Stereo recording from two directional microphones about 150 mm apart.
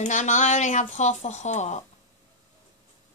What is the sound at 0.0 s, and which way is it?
Speech, 55° left (ahead or behind).